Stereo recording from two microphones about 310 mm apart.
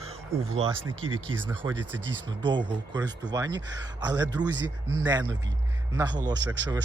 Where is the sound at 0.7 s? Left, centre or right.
Right.